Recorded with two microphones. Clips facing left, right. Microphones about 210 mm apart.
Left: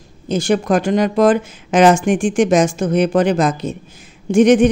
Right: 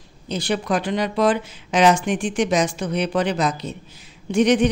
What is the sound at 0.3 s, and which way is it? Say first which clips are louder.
Speech: left 7 dB; 45° left (ahead or behind).